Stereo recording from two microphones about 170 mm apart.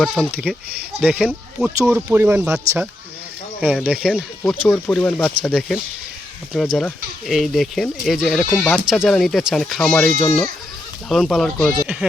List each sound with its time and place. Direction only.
0.0 s speech: centre (ahead or behind)